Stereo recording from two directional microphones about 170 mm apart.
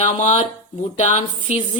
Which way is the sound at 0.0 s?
45° left (ahead or behind).